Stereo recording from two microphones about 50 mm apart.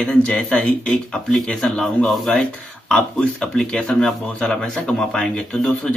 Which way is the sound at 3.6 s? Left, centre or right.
Centre.